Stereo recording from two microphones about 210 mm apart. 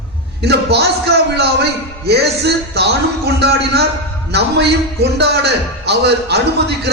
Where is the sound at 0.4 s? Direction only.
50° right (ahead or behind).